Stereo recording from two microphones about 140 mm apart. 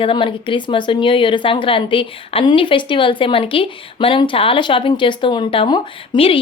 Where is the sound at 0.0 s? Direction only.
40° left (ahead or behind).